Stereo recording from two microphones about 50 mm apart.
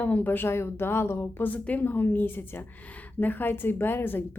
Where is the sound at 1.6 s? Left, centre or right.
Left.